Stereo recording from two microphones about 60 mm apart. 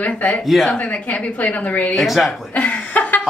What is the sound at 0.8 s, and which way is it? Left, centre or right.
A woman's voice, left.